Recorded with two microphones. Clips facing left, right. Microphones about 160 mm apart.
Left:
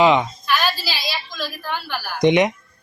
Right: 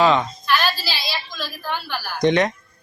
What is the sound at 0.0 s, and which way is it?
Speech, 15° left (ahead or behind).